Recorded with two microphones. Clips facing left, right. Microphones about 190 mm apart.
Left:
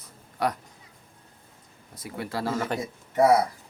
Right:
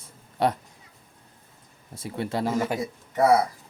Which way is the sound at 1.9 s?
25° right (ahead or behind).